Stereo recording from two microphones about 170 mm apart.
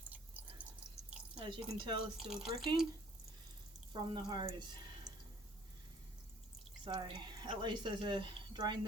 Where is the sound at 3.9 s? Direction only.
25° right (ahead or behind).